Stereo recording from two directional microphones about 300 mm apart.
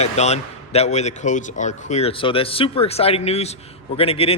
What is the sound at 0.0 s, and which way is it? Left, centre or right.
A man's voice, left.